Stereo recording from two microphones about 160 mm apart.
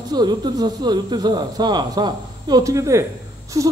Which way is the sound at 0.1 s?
25° right (ahead or behind).